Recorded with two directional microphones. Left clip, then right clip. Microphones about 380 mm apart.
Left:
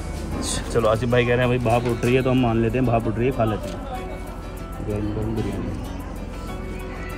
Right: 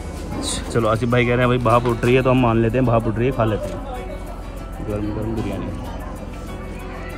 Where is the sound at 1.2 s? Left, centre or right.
Right.